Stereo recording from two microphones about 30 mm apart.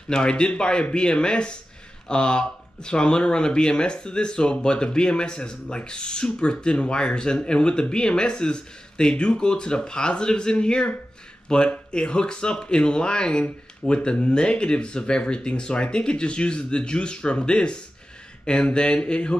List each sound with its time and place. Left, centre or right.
0.1 s speech: left